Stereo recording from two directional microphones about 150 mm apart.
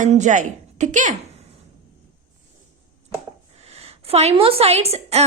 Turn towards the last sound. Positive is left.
turn(degrees=-40)  # may be behind; listen again after turning